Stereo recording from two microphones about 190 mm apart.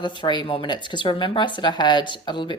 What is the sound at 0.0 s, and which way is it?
Speech, 25° left (ahead or behind).